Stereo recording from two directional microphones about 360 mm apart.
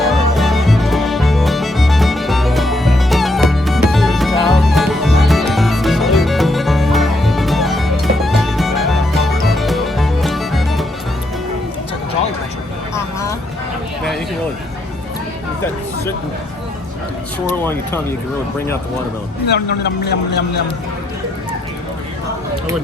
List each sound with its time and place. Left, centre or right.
0.0 s music: centre
12.9 s vehicle: centre
19.5 s a man's voice: left